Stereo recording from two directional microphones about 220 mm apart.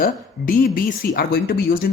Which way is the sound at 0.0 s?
40° left (ahead or behind).